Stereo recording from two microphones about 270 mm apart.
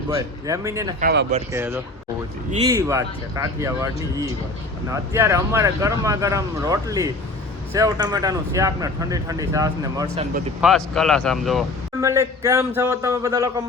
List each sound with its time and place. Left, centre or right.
0.1 s speech: centre
1.0 s speech: right
1.5 s speech: centre
10.6 s speech: centre
12.0 s speech: centre